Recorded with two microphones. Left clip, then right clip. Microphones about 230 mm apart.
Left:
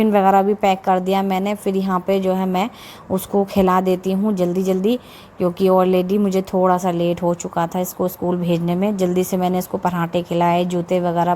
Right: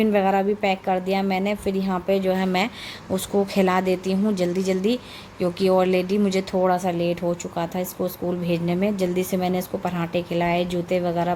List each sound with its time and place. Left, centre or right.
0.0 s speech: left